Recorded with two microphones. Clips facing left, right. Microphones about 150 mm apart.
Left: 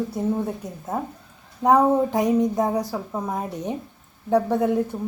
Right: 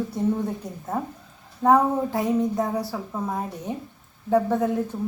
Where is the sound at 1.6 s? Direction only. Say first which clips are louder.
Left 2 dB; 15° left (ahead or behind).